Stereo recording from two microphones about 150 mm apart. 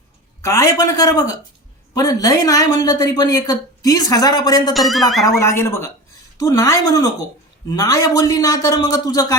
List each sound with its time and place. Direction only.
0.4 s a woman's voice: 20° left (ahead or behind)
4.7 s speech: centre (ahead or behind)
5.4 s a woman's voice: 20° left (ahead or behind)